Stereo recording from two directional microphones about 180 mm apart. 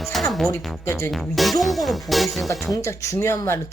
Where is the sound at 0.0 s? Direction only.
Centre (ahead or behind).